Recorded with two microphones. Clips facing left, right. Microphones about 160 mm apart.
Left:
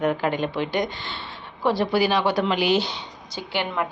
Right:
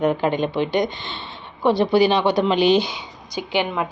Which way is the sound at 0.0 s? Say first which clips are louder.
Right 3 dB; 20° right (ahead or behind).